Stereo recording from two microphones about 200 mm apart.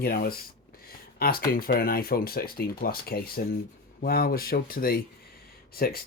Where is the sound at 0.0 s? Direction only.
50° left (ahead or behind).